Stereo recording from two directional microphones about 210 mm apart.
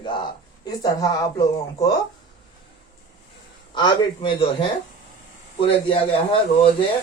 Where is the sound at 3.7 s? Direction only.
20° left (ahead or behind).